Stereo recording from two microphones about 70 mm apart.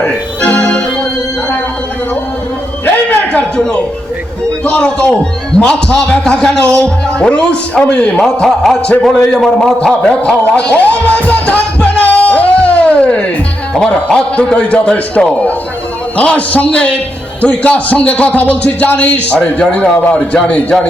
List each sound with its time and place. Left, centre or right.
0.4 s organ: centre
2.8 s a sound: left
4.6 s a man's voice: centre
8.2 s a man's voice: centre
10.4 s music: centre
13.7 s a man's voice: centre